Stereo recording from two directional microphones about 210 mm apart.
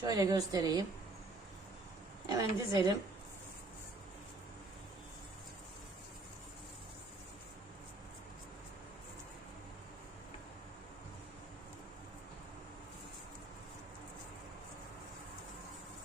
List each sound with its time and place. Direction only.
0.0 s a woman's voice: 20° right (ahead or behind)
2.3 s a woman's voice: 15° right (ahead or behind)